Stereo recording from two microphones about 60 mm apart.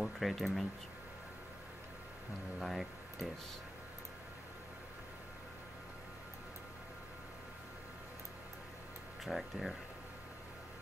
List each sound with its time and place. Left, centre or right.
0.0 s speech: centre
2.6 s speech: centre
9.2 s speech: centre